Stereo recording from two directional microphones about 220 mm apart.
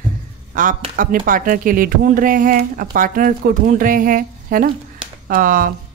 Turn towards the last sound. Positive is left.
turn(degrees=-40)  # may be behind; listen again after turning